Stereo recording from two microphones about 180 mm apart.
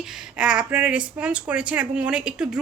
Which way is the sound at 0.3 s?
5° right (ahead or behind).